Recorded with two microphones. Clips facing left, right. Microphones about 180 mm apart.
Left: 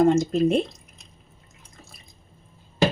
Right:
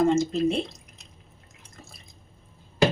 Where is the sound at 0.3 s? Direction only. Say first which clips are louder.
Left 4 dB; 50° left (ahead or behind).